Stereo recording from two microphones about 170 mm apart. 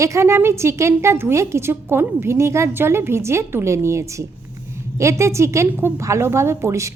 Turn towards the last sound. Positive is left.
turn(degrees=-15)  # may be behind; listen again after turning